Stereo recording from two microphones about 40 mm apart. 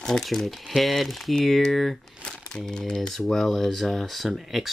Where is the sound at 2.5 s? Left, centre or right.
Left.